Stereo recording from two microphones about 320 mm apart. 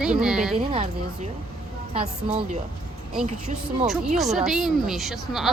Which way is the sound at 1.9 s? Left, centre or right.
Centre.